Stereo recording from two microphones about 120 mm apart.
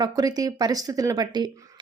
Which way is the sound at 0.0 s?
30° right (ahead or behind).